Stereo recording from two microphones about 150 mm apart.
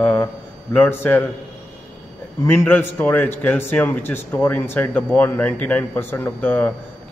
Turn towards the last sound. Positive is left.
turn(degrees=10)  # may be behind; listen again after turning